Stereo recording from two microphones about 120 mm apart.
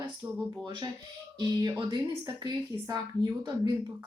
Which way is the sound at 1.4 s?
35° right (ahead or behind).